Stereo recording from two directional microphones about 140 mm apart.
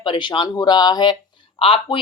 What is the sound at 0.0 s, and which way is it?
Speech, 35° left (ahead or behind).